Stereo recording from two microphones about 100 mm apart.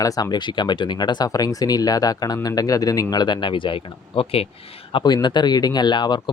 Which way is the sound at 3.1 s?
45° left (ahead or behind).